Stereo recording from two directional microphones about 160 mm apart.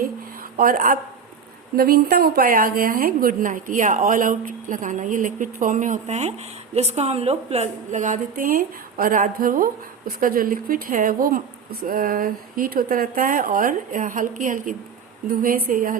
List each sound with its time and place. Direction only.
0.5 s a woman's voice: 60° right (ahead or behind)
1.7 s a woman's voice: 70° right (ahead or behind)